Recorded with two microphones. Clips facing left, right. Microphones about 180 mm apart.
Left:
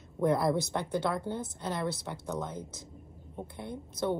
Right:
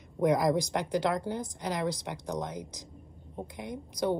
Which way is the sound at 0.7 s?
90° right.